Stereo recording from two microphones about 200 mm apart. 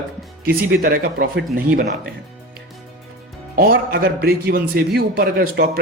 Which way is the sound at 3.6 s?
45° right (ahead or behind).